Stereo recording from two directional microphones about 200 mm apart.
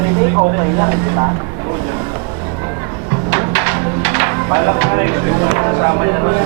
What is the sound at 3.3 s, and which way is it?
Music, 15° right (ahead or behind).